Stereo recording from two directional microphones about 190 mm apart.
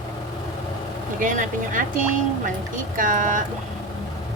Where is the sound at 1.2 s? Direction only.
45° right (ahead or behind).